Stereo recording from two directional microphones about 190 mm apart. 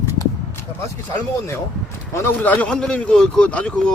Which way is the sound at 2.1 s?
10° left (ahead or behind).